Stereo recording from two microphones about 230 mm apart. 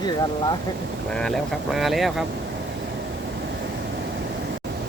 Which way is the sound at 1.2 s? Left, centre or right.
Centre.